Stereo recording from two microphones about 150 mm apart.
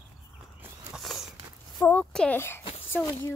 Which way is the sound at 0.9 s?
Centre (ahead or behind).